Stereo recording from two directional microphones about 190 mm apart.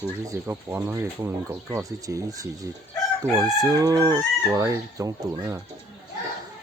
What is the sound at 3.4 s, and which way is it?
Chicken, 20° right (ahead or behind).